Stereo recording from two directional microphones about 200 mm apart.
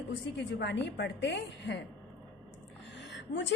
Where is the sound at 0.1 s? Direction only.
60° left (ahead or behind).